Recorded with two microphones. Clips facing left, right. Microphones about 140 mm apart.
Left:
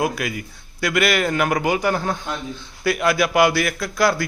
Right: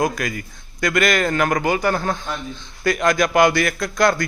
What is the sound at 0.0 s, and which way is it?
A man's voice, 10° left (ahead or behind).